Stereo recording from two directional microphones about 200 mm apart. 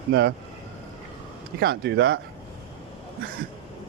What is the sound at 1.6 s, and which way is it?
Speech, 55° right (ahead or behind).